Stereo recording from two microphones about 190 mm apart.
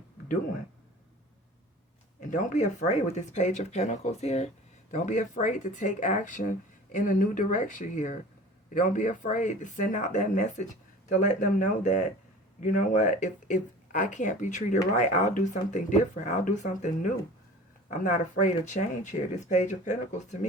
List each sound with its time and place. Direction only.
2.3 s speech: 40° left (ahead or behind)